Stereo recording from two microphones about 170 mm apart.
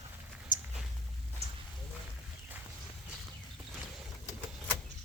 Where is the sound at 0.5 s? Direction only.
50° left (ahead or behind).